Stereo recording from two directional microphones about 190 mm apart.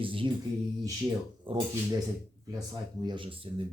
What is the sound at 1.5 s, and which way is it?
Speech, 25° right (ahead or behind).